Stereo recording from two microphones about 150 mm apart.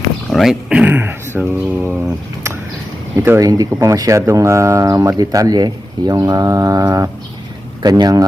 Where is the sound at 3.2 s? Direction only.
20° right (ahead or behind).